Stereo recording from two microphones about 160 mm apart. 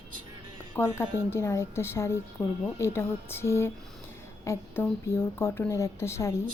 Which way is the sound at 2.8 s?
15° left (ahead or behind).